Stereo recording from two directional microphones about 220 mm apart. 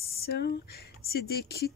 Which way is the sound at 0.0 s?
45° left (ahead or behind).